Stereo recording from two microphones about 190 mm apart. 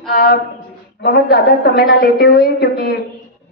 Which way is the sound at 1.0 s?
55° left (ahead or behind).